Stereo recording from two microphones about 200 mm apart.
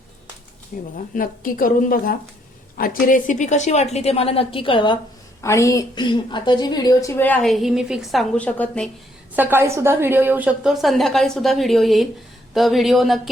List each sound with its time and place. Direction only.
0.7 s a woman's voice: 45° left (ahead or behind); by 8.9 s 5° left (ahead or behind)
9.3 s a woman's voice: 10° right (ahead or behind)